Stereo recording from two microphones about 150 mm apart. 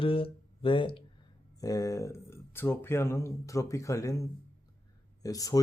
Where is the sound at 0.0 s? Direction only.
35° left (ahead or behind).